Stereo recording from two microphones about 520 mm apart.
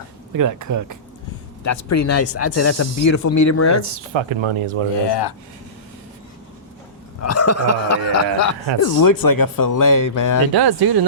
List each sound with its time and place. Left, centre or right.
0.3 s speech: right
1.6 s speech: left
3.8 s speech: right
5.0 s speech: left
7.2 s speech: left
10.5 s speech: right